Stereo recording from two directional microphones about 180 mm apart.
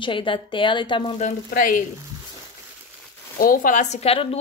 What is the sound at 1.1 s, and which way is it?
Speech, 45° left (ahead or behind).